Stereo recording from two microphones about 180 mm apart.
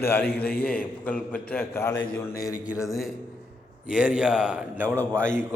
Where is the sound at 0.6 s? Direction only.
10° left (ahead or behind).